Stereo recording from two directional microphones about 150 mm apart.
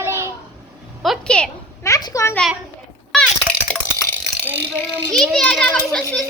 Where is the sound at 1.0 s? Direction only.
Centre (ahead or behind).